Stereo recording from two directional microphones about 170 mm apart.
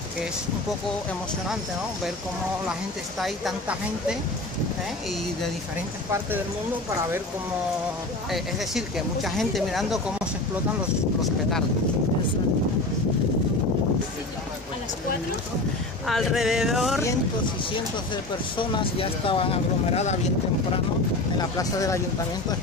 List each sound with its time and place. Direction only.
3.2 s speech: centre (ahead or behind)
8.3 s speech: centre (ahead or behind)
16.1 s speech: centre (ahead or behind)
17.7 s speech: 30° left (ahead or behind)
21.4 s speech: 20° left (ahead or behind)